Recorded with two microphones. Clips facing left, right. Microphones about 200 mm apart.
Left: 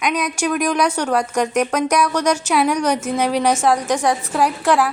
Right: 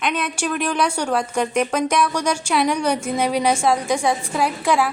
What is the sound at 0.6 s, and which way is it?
A woman's voice, 5° right (ahead or behind).